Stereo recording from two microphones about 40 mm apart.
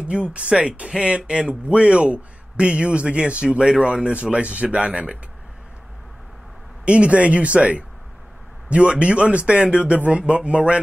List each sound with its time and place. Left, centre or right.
0.0 s a man's voice: right
6.8 s a man's voice: right